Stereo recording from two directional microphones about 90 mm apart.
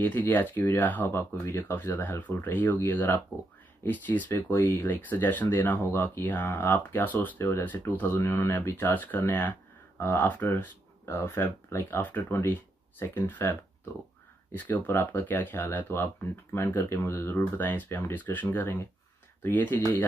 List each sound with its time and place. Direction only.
0.0 s speech: 20° left (ahead or behind)